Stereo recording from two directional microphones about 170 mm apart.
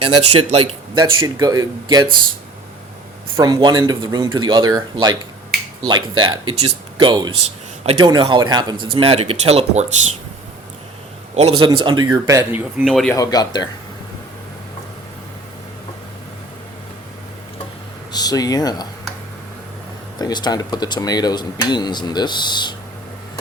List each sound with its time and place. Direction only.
0.0 s speech: 35° right (ahead or behind)
0.9 s speech: 25° right (ahead or behind)
3.3 s speech: 20° right (ahead or behind); by 9.8 s 40° right (ahead or behind)
11.3 s speech: 35° right (ahead or behind)
12.2 s speech: 15° right (ahead or behind)
12.8 s speech: centre (ahead or behind)
13.1 s speech: 25° left (ahead or behind)
18.1 s speech: 25° left (ahead or behind)
20.1 s speech: 25° left (ahead or behind)